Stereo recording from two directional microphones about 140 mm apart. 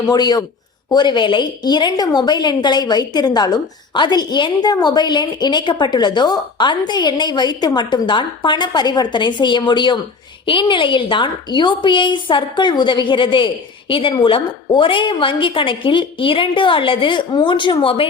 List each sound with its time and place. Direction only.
0.1 s a woman's voice: 30° left (ahead or behind)